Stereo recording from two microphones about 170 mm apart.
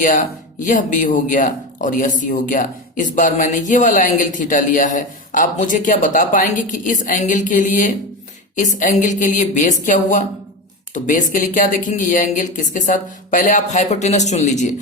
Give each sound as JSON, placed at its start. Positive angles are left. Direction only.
{"t": 0.0, "sound": "speech", "side_deg": 50}